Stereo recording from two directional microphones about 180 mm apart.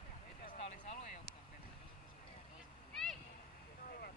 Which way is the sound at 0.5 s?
45° left (ahead or behind).